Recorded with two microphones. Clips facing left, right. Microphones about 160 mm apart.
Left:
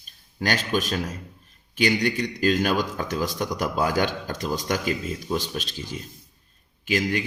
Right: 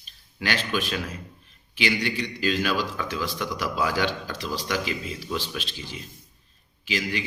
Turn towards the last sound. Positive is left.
turn(degrees=50)  # may be behind; listen again after turning